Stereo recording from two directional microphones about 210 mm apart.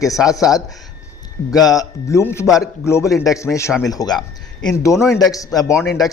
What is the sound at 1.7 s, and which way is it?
A man's voice, 15° left (ahead or behind).